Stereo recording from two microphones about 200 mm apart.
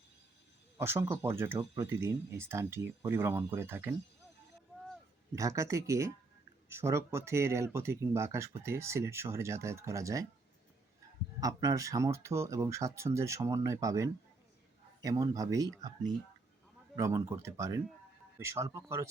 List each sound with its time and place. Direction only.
0.8 s speech: 10° right (ahead or behind)
5.3 s speech: 15° right (ahead or behind)
11.3 s speech: 15° right (ahead or behind)